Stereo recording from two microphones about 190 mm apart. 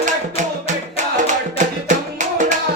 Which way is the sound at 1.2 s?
40° right (ahead or behind).